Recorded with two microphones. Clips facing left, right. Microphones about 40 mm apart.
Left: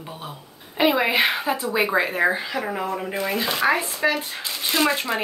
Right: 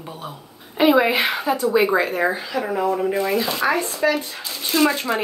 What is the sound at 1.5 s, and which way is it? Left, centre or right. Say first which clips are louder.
Speech: right 4 dB; left.